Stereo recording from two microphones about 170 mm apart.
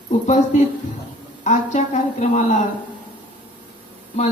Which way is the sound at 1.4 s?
45° left (ahead or behind).